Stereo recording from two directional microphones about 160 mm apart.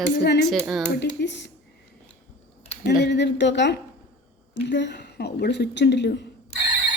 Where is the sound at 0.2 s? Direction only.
90° left.